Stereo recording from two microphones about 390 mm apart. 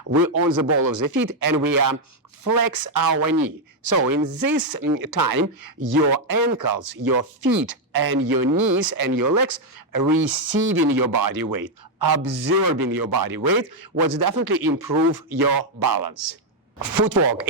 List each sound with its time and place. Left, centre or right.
0.1 s speech: right